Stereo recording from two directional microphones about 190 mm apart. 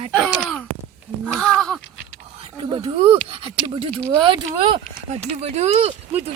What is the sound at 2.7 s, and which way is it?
Speech, 30° right (ahead or behind).